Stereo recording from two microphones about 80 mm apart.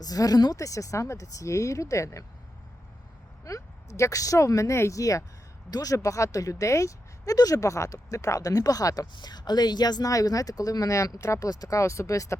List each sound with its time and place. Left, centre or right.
0.0 s speech: left
3.4 s speech: left
9.1 s speech: left